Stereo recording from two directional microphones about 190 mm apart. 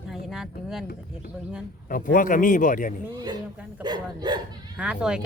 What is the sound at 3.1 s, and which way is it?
Speech, 20° right (ahead or behind).